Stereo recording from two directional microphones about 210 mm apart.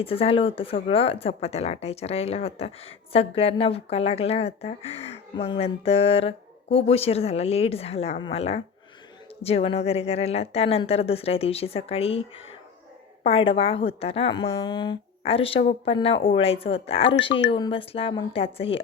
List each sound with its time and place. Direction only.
0.0 s speech: 25° left (ahead or behind)
13.2 s speech: 25° left (ahead or behind)